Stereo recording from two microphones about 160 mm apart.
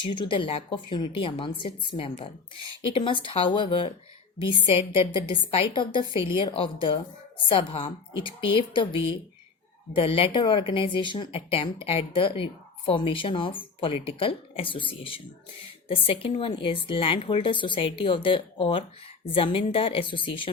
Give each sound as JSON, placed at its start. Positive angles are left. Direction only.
{"t": 0.0, "sound": "speech", "side_deg": 30}